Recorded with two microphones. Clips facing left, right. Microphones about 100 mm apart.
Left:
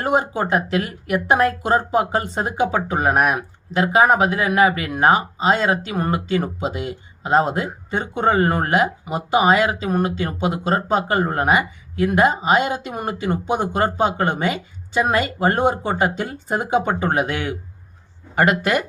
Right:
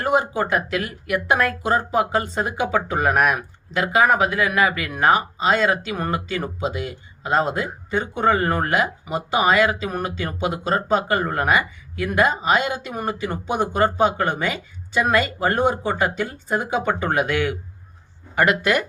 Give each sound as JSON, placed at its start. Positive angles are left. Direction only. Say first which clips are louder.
{"t": 0.2, "sound": "speech", "louder": "left 1 dB", "side_deg": 30}